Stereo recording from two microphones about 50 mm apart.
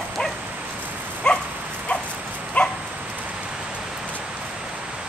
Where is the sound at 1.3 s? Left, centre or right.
Left.